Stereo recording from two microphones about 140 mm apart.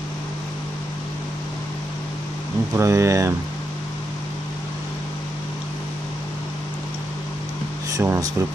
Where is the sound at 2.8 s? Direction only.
20° right (ahead or behind).